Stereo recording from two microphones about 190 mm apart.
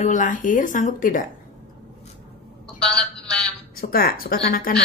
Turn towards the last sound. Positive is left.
turn(degrees=50)  # may be behind; listen again after turning